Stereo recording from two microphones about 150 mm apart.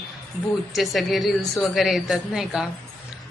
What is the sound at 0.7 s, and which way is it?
A woman's voice, centre (ahead or behind).